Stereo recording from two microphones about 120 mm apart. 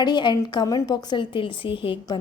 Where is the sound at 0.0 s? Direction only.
40° left (ahead or behind).